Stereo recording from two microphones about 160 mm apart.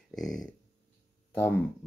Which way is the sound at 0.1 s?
Centre (ahead or behind).